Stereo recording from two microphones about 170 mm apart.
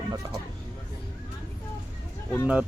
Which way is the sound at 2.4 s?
10° right (ahead or behind).